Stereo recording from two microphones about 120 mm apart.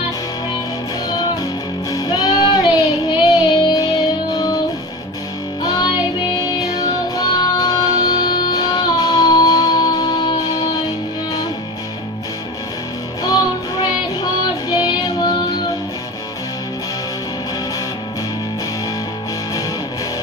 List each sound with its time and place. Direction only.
1.9 s music: 30° left (ahead or behind)
3.2 s child singing: 35° left (ahead or behind)
5.6 s music: 35° left (ahead or behind)
14.7 s child singing: 35° left (ahead or behind)